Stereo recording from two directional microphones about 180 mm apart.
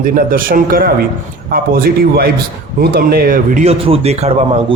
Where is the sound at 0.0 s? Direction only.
50° right (ahead or behind).